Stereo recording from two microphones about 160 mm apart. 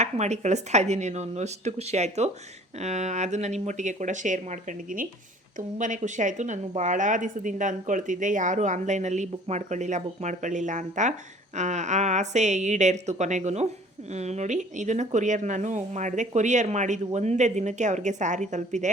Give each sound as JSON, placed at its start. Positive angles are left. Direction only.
{"t": 0.0, "sound": "speech", "side_deg": -45}
{"t": 5.5, "sound": "speech", "side_deg": -55}